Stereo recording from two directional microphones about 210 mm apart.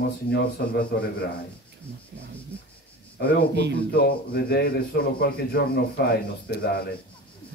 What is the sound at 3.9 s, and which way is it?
A man's voice, 50° left (ahead or behind).